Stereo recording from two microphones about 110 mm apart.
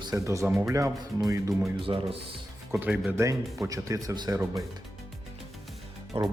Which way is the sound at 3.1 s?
25° right (ahead or behind).